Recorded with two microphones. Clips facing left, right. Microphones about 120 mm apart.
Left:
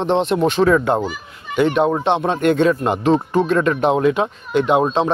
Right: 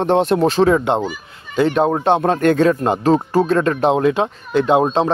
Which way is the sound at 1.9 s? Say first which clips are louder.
Right 2 dB; 40° right (ahead or behind).